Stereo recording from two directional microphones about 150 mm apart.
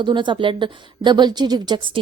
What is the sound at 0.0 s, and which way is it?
A woman's voice, 30° right (ahead or behind).